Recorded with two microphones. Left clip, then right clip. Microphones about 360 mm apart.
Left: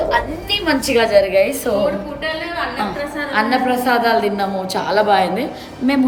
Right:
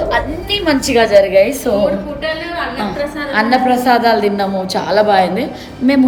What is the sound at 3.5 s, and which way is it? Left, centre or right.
A woman's voice, centre.